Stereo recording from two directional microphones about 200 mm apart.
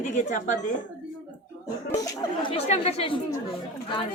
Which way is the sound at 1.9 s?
15° left (ahead or behind).